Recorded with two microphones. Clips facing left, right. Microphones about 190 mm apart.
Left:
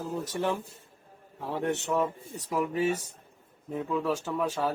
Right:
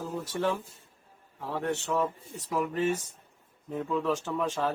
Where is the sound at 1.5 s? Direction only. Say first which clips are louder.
Left 1 dB; 20° left (ahead or behind).